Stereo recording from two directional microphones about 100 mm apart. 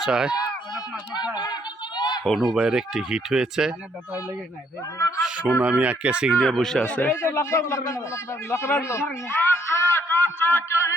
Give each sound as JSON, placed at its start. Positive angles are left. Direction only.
{"t": 0.0, "sound": "speech", "side_deg": -5}
{"t": 2.0, "sound": "a sound", "side_deg": 45}
{"t": 2.2, "sound": "speech", "side_deg": 0}
{"t": 4.9, "sound": "a man's voice", "side_deg": 25}
{"t": 5.2, "sound": "speech", "side_deg": -10}
{"t": 7.2, "sound": "a man's voice", "side_deg": 30}